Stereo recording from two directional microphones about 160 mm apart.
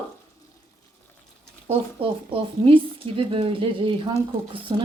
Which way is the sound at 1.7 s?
35° right (ahead or behind).